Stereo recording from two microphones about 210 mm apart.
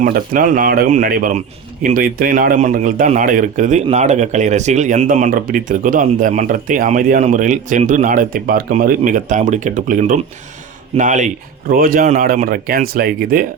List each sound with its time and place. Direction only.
0.0 s a man's voice: 40° right (ahead or behind)